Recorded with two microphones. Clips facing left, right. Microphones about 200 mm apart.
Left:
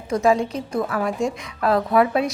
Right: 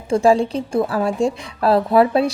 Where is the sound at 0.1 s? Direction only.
30° right (ahead or behind).